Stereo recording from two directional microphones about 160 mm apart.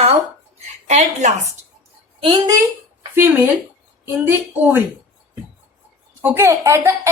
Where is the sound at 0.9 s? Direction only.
45° right (ahead or behind).